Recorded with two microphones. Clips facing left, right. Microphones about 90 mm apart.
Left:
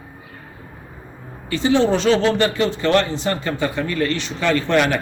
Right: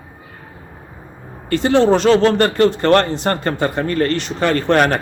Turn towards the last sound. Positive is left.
turn(degrees=-45)  # may be behind; listen again after turning